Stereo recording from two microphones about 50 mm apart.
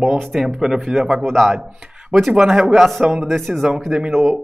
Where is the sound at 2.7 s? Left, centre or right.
Centre.